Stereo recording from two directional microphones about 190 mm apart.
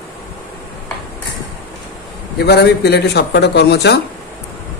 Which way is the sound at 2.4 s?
60° left (ahead or behind).